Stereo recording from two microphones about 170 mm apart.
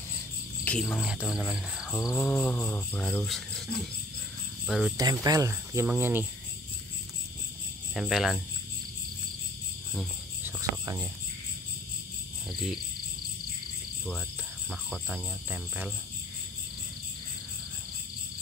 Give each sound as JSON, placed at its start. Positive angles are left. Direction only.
{"t": 0.7, "sound": "cricket", "side_deg": 5}
{"t": 4.6, "sound": "cricket", "side_deg": -5}
{"t": 4.9, "sound": "speech", "side_deg": -20}
{"t": 7.9, "sound": "cricket", "side_deg": 0}
{"t": 12.4, "sound": "cricket", "side_deg": 0}
{"t": 14.7, "sound": "cricket", "side_deg": -5}